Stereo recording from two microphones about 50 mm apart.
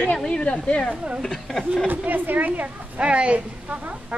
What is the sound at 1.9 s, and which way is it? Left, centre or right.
A woman's voice, right.